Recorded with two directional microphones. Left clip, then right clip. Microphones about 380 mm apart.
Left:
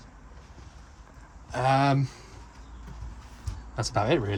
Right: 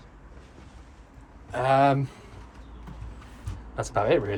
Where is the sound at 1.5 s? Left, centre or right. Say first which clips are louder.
Right 3 dB; centre.